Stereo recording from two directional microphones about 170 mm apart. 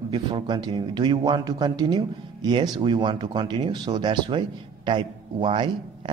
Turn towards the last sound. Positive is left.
turn(degrees=-25)  # may be behind; listen again after turning